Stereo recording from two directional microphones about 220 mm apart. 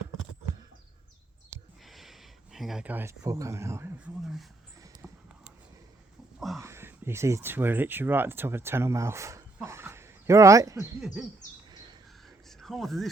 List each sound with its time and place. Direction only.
1.8 s speech: centre (ahead or behind)
5.0 s clip-clop: centre (ahead or behind)
6.6 s speech: 10° right (ahead or behind)
11.0 s owl: 5° right (ahead or behind)
11.7 s a sound: 20° right (ahead or behind)
12.5 s a sound: centre (ahead or behind)